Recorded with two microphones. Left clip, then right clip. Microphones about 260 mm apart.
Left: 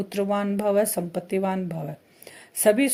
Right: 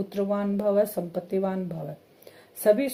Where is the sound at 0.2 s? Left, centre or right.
Left.